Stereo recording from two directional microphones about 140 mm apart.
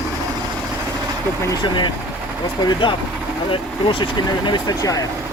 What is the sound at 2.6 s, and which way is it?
Speech, 35° left (ahead or behind).